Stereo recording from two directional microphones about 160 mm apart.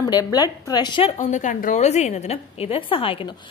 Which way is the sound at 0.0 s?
25° left (ahead or behind).